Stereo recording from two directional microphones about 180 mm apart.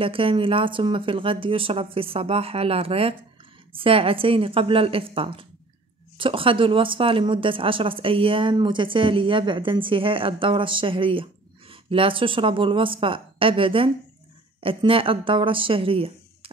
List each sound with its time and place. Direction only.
0.0 s a woman's voice: 30° right (ahead or behind)